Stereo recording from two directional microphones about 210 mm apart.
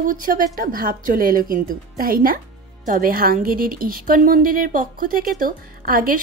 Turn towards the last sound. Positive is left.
turn(degrees=-40)  # may be behind; listen again after turning